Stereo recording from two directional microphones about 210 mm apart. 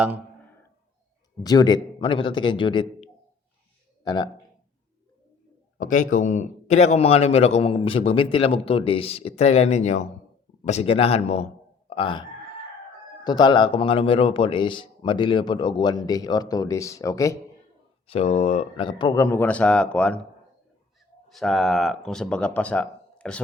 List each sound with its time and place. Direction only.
1.4 s speech: 20° left (ahead or behind)
5.7 s a man's voice: 40° left (ahead or behind)
13.2 s speech: 20° left (ahead or behind)
18.1 s speech: 30° left (ahead or behind); by 20.2 s 5° left (ahead or behind)
21.3 s speech: centre (ahead or behind)